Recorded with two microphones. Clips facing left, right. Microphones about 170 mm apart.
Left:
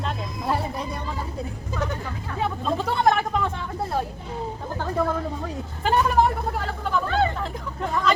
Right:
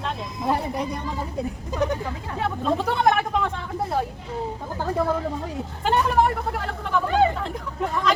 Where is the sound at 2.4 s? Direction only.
Centre (ahead or behind).